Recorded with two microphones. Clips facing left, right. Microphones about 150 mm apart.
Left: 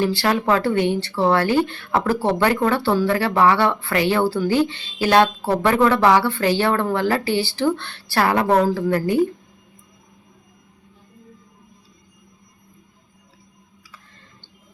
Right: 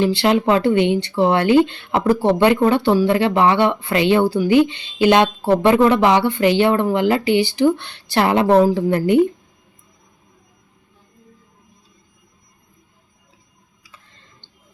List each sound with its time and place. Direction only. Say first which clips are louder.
0.0 s speech: right 4 dB; 20° right (ahead or behind)